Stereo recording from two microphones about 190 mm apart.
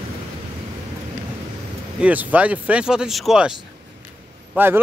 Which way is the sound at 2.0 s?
10° right (ahead or behind).